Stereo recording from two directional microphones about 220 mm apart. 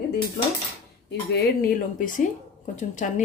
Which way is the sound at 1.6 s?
40° left (ahead or behind).